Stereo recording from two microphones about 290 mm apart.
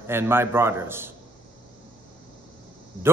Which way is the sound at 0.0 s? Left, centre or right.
Centre.